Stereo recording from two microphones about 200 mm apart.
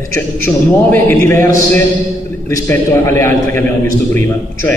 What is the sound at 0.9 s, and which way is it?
Speech, 10° left (ahead or behind).